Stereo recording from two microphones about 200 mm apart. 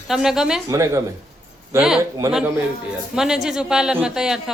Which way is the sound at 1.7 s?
5° right (ahead or behind).